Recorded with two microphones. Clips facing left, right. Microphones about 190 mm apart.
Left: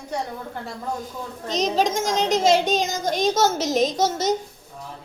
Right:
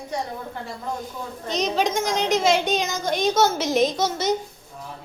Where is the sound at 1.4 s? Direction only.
40° left (ahead or behind).